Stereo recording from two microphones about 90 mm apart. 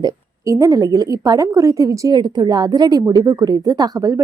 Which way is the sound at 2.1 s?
55° right (ahead or behind).